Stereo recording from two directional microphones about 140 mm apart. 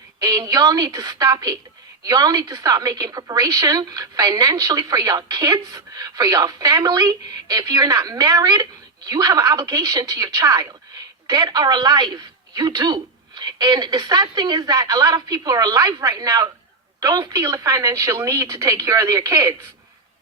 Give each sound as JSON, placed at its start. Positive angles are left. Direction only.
{"t": 0.2, "sound": "a woman's voice", "side_deg": -25}